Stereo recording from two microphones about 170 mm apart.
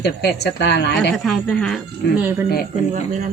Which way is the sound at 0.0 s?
75° left (ahead or behind).